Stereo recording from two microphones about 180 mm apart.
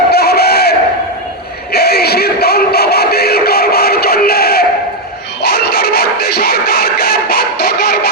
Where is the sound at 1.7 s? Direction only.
60° left (ahead or behind).